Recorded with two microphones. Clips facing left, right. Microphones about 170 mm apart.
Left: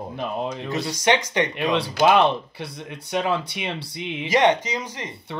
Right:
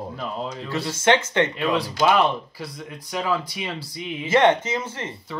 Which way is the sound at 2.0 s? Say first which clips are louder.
Left 2 dB; 25° left (ahead or behind).